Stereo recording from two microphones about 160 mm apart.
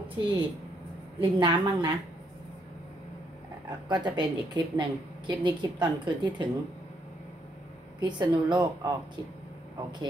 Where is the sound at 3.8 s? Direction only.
25° right (ahead or behind).